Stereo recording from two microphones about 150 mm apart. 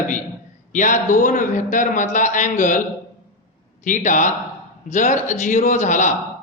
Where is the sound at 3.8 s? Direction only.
60° left (ahead or behind).